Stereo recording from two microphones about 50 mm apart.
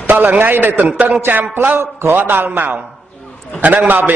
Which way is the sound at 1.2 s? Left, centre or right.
Right.